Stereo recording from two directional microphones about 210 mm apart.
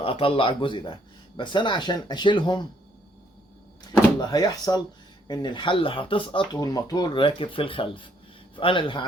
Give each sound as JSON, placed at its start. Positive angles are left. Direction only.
{"t": 0.0, "sound": "speech", "side_deg": 25}
{"t": 4.2, "sound": "speech", "side_deg": 20}